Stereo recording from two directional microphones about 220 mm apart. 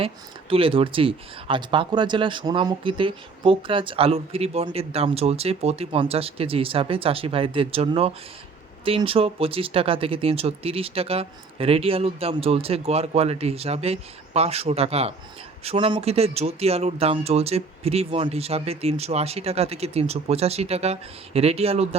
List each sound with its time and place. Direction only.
0.5 s speech: 25° right (ahead or behind)